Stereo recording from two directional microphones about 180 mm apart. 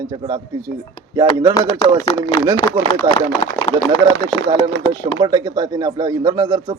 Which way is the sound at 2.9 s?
30° left (ahead or behind).